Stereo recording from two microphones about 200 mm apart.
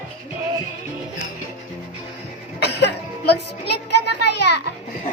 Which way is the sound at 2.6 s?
55° left (ahead or behind).